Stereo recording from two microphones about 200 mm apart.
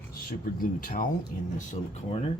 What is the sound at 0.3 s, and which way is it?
Speech, 45° left (ahead or behind).